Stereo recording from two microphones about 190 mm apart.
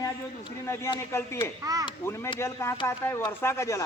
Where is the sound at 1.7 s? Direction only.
20° right (ahead or behind).